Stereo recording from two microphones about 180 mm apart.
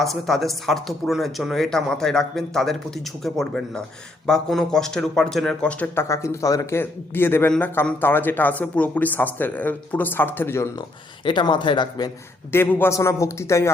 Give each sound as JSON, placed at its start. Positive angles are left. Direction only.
{"t": 0.0, "sound": "speech", "side_deg": 0}
{"t": 11.3, "sound": "speech", "side_deg": 25}